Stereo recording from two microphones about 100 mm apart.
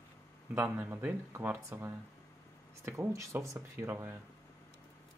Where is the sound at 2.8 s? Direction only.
30° right (ahead or behind).